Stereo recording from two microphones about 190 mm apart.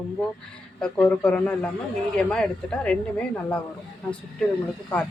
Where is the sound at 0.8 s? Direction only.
5° left (ahead or behind).